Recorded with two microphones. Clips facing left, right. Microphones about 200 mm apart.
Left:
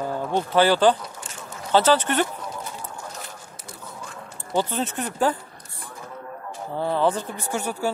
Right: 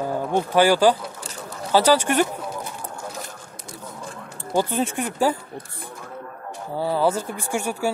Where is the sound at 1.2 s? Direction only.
35° right (ahead or behind).